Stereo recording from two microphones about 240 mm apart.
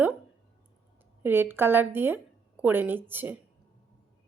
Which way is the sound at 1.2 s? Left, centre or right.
Centre.